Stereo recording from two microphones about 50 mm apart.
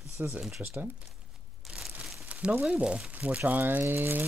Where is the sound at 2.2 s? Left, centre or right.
Right.